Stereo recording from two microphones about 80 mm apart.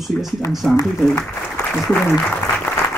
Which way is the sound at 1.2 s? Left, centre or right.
Left.